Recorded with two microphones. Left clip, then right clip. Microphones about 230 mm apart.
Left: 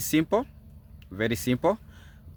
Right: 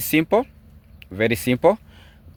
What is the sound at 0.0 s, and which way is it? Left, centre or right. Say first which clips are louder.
Speech: right 6 dB; right.